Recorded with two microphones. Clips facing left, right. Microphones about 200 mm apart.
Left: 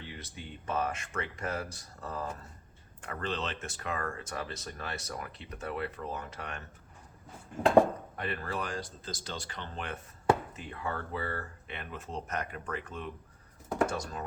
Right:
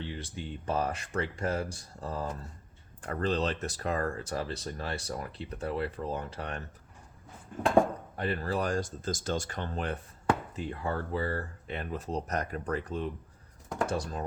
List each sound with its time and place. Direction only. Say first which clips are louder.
0.0 s speech: right 6 dB; 30° right (ahead or behind)
8.1 s speech: right 5 dB; 35° right (ahead or behind)